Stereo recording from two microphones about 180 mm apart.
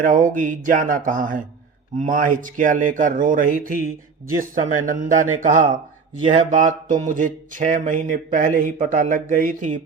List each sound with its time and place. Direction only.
0.0 s speech: 45° right (ahead or behind)
4.9 s speech: 45° right (ahead or behind)